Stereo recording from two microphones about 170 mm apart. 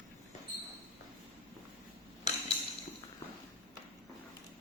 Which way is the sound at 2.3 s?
40° left (ahead or behind).